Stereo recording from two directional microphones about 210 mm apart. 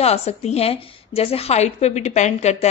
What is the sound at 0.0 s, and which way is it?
A woman's voice, 30° left (ahead or behind).